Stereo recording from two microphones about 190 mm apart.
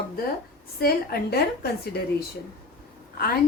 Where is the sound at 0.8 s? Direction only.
55° left (ahead or behind).